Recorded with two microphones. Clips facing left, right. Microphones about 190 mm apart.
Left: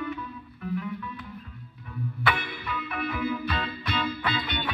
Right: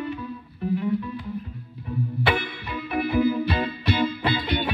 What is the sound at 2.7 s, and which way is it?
Music, 25° right (ahead or behind).